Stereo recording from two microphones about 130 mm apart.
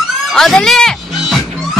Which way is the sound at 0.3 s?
Centre (ahead or behind).